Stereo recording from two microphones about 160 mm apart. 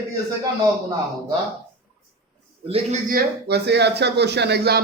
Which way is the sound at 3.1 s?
80° right.